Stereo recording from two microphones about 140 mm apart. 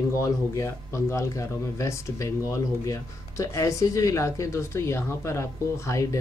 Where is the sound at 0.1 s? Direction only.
20° left (ahead or behind).